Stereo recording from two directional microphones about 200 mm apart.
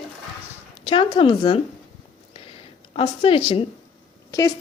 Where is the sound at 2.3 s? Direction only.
25° left (ahead or behind).